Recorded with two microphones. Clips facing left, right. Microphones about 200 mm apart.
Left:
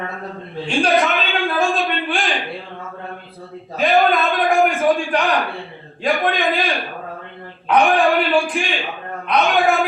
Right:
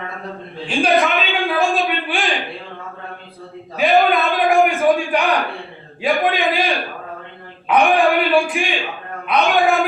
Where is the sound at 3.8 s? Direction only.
Centre (ahead or behind).